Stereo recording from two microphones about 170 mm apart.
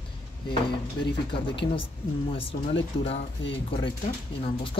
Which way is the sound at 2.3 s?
35° left (ahead or behind).